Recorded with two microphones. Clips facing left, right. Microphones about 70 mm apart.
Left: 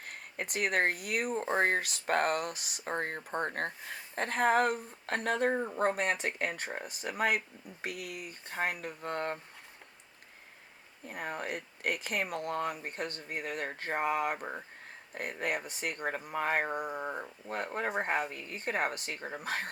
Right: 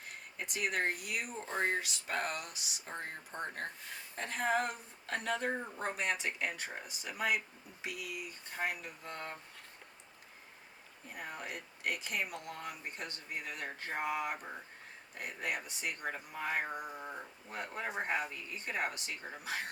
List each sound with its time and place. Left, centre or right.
0.0 s speech: left
11.1 s speech: left